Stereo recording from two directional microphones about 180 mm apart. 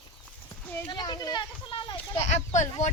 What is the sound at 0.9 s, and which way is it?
A child's voice, 25° left (ahead or behind).